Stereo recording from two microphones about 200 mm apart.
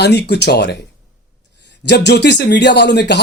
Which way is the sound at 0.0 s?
55° left (ahead or behind).